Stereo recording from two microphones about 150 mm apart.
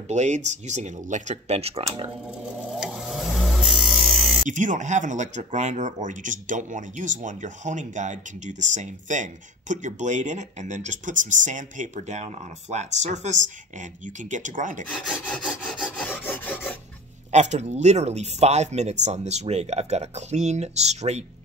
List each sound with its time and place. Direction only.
0.1 s speech: 50° right (ahead or behind)
2.4 s a sound: 5° right (ahead or behind)
4.5 s speech: 55° right (ahead or behind)
14.9 s rub: 5° left (ahead or behind)
15.2 s filing: 5° left (ahead or behind)
17.3 s speech: 50° right (ahead or behind)